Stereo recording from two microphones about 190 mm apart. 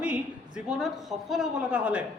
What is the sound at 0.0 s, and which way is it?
A woman's voice, 5° right (ahead or behind).